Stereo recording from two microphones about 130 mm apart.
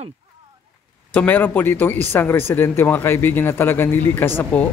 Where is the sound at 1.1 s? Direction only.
10° left (ahead or behind).